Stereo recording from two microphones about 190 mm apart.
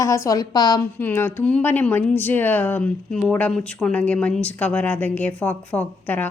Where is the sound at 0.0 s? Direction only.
15° left (ahead or behind).